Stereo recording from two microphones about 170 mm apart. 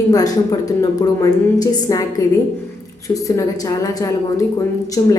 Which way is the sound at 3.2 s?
20° left (ahead or behind).